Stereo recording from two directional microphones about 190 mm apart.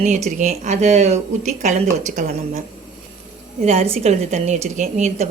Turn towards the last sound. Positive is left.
turn(degrees=-35)  # may be behind; listen again after turning